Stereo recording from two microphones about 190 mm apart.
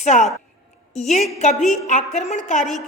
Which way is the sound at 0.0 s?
40° left (ahead or behind).